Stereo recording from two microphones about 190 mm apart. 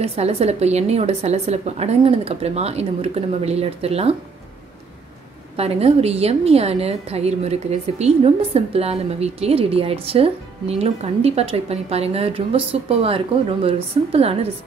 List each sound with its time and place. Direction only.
0.0 s a woman's voice: 30° right (ahead or behind)
5.6 s a woman's voice: 30° right (ahead or behind)